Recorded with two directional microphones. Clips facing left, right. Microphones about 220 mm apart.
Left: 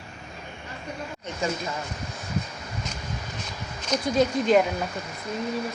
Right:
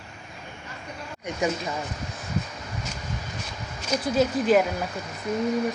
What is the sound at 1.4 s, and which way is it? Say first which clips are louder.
Speech: right 2 dB; 15° right (ahead or behind).